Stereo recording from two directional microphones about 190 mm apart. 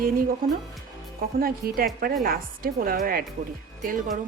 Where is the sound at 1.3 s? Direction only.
50° right (ahead or behind).